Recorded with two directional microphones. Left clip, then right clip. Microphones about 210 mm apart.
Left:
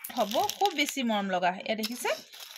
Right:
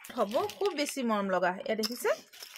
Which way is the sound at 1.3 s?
15° right (ahead or behind).